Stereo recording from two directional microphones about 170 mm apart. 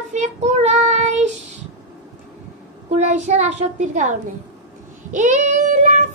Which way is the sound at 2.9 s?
45° right (ahead or behind).